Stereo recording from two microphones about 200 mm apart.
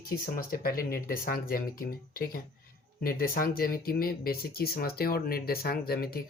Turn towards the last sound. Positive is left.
turn(degrees=50)  # may be behind; listen again after turning